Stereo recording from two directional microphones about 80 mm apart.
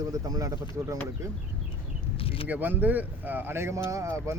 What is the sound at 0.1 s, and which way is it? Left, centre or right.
Speech, right.